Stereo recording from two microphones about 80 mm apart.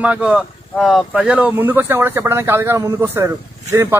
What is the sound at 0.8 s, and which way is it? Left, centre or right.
Speech, centre.